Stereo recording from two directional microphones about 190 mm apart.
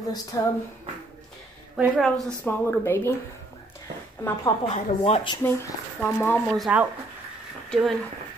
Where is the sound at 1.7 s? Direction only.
Centre (ahead or behind).